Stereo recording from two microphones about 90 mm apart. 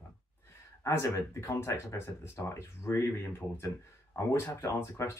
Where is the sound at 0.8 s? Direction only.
30° left (ahead or behind).